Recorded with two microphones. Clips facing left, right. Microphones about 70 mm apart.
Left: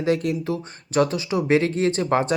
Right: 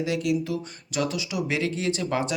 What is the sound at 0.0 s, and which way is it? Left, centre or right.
Speech, left.